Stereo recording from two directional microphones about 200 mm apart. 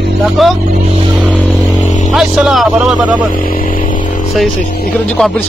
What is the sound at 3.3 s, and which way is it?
Vehicle, 45° left (ahead or behind).